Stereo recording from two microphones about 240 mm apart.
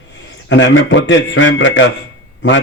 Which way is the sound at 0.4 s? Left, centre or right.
Left.